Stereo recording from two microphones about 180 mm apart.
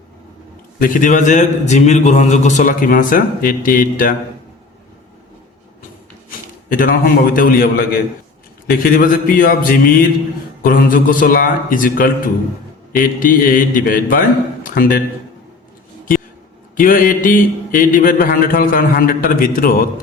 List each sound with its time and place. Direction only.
0.8 s a man's voice: 50° left (ahead or behind)
6.7 s a man's voice: 50° left (ahead or behind)
14.6 s a sound: 50° left (ahead or behind)
16.7 s a man's voice: 50° left (ahead or behind)